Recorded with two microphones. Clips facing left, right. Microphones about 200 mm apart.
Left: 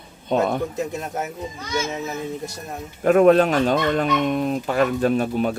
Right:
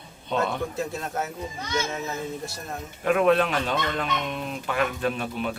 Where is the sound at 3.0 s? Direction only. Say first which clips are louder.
Left 7 dB; 40° left (ahead or behind).